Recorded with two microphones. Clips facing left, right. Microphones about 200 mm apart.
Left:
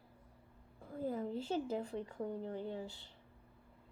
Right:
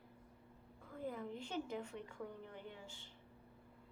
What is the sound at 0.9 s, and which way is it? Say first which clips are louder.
Speech: left 6 dB; 35° left (ahead or behind).